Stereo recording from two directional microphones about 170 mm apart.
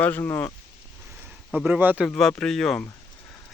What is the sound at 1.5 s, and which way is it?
Speech, 5° right (ahead or behind).